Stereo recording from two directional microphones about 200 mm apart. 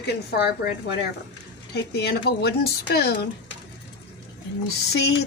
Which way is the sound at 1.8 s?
55° left (ahead or behind).